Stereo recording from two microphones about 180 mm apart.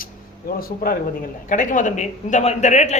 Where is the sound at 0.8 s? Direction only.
55° left (ahead or behind).